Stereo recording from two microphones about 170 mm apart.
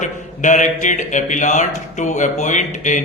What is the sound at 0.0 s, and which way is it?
Speech, 45° left (ahead or behind).